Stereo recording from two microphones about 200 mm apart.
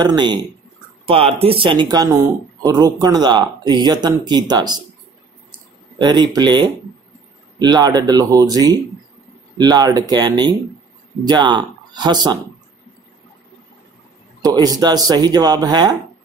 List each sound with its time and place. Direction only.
0.0 s speech: 20° right (ahead or behind)
5.9 s speech: 20° right (ahead or behind)
14.4 s speech: 20° right (ahead or behind)